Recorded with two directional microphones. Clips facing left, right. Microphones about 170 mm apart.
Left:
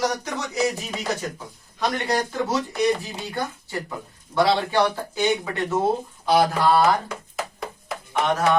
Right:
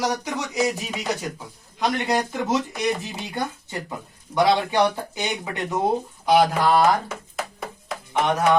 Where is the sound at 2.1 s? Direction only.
20° right (ahead or behind).